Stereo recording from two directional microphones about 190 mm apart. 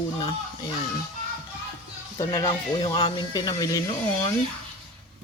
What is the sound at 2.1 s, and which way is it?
Speech, 20° left (ahead or behind).